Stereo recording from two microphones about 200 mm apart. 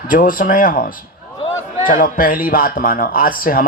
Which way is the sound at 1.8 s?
45° left (ahead or behind).